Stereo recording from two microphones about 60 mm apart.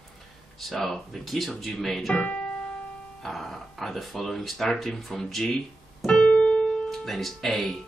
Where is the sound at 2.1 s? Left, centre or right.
Left.